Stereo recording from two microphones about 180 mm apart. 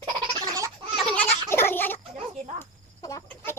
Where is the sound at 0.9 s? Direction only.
5° left (ahead or behind).